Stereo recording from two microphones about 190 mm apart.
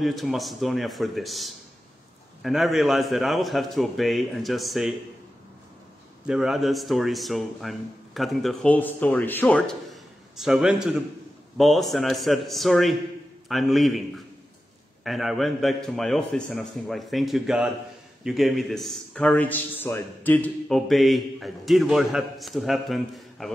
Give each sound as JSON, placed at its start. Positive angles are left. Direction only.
{"t": 0.0, "sound": "a man's voice", "side_deg": 0}
{"t": 6.2, "sound": "a man's voice", "side_deg": -5}